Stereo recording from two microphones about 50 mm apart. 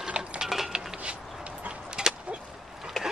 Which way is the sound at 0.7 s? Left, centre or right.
Centre.